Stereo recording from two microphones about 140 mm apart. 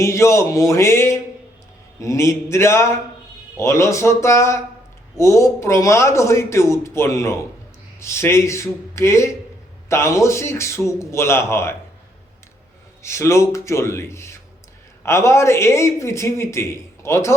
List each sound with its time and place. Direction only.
0.0 s a man's voice: 20° left (ahead or behind)
13.0 s a man's voice: 20° left (ahead or behind)